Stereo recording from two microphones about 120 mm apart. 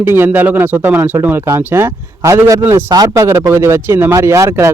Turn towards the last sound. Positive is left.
turn(degrees=-25)  # may be behind; listen again after turning